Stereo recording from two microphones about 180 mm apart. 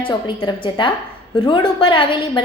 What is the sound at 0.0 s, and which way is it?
A woman's voice, 25° left (ahead or behind).